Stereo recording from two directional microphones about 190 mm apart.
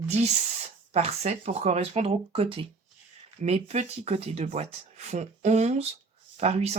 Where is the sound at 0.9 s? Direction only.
35° right (ahead or behind).